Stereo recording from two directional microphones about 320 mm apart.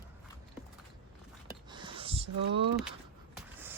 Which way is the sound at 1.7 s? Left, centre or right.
Centre.